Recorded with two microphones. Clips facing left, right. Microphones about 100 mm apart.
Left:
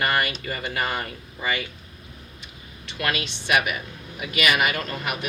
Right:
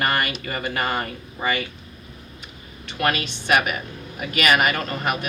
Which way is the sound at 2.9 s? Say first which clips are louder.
Right 4 dB; 45° right (ahead or behind).